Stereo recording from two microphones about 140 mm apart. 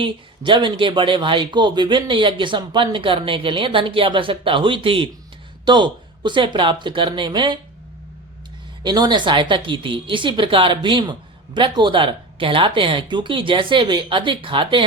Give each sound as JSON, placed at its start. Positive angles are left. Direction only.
{"t": 0.0, "sound": "a woman's voice", "side_deg": -35}
{"t": 8.8, "sound": "a woman's voice", "side_deg": -30}